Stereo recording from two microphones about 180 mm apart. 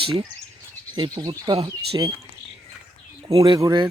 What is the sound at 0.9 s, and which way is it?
Speech, 25° right (ahead or behind).